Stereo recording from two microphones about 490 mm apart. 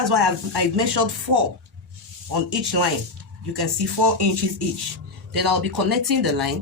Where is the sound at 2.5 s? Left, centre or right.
Right.